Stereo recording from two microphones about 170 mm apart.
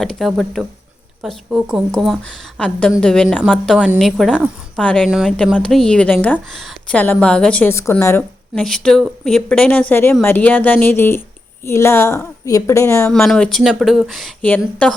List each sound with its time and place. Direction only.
0.0 s a woman's voice: centre (ahead or behind)
5.1 s a woman's voice: 5° right (ahead or behind); by 13.1 s 15° left (ahead or behind)
13.1 s a woman's voice: 5° left (ahead or behind)